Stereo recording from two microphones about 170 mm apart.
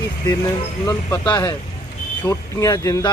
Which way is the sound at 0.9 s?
20° left (ahead or behind).